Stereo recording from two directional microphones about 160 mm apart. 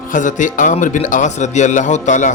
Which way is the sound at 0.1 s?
50° left (ahead or behind).